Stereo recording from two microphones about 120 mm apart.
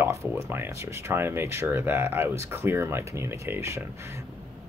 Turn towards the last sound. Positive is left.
turn(degrees=-20)  # may be behind; listen again after turning